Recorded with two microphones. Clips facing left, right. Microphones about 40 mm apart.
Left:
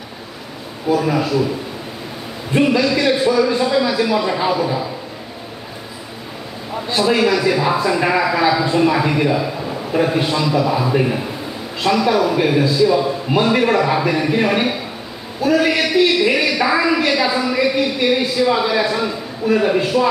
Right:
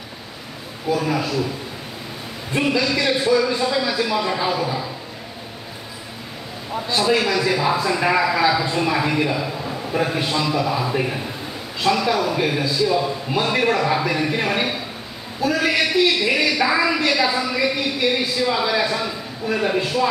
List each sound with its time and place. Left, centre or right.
0.9 s a man's voice: centre
2.8 s a man's voice: centre
6.9 s a man's voice: centre